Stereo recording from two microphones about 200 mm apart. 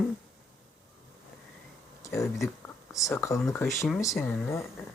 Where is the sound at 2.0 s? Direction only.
15° left (ahead or behind).